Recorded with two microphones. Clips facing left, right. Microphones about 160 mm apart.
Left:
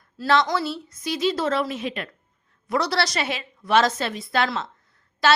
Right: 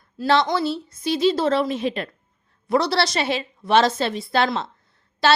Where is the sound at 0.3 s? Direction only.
30° right (ahead or behind).